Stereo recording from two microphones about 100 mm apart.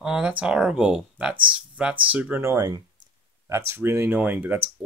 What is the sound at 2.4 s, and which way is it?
Speech, 35° right (ahead or behind).